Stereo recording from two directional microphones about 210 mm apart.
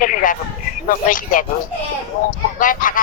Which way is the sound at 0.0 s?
40° left (ahead or behind).